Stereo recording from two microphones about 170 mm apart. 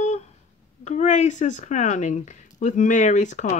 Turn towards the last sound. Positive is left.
turn(degrees=45)  # may be behind; listen again after turning